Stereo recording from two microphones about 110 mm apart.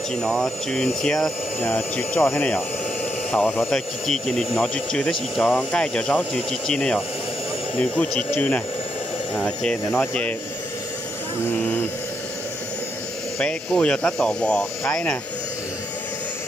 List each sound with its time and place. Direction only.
0.1 s speech: 5° left (ahead or behind)
8.4 s speech: 10° left (ahead or behind)
13.4 s speech: 10° left (ahead or behind)